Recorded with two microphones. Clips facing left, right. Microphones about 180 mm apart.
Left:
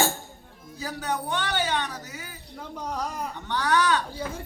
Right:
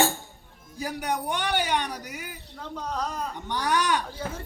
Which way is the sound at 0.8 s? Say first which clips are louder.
Right 1 dB; 15° right (ahead or behind).